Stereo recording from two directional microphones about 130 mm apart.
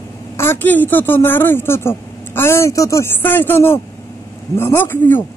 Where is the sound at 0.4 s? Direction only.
15° left (ahead or behind).